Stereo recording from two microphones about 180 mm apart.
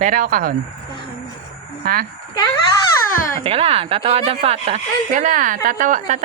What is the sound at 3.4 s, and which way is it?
A woman's voice, 35° right (ahead or behind).